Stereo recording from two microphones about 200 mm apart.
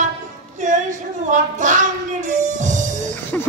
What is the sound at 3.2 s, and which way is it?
Music, 10° left (ahead or behind).